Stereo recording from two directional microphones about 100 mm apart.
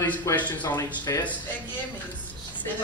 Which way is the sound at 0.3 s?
30° left (ahead or behind).